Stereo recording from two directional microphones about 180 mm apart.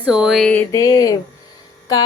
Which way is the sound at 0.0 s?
5° right (ahead or behind).